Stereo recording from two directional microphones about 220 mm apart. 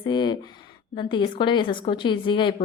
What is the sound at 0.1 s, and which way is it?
Speech, 20° left (ahead or behind).